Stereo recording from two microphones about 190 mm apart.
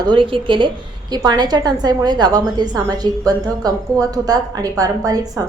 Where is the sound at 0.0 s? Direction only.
25° right (ahead or behind).